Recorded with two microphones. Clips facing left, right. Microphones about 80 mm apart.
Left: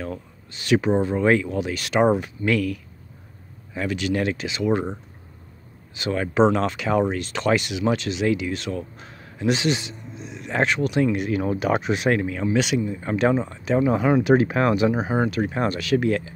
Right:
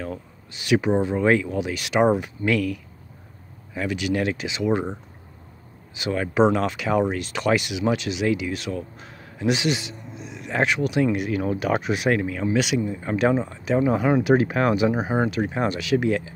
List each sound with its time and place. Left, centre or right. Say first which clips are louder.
0.0 s speech: even; centre
1.6 s speech: even; centre
4.5 s speech: left 1 dB; centre
6.1 s speech: left 1 dB; centre
11.3 s speech: left 1 dB; centre
11.8 s speech: left 1 dB; centre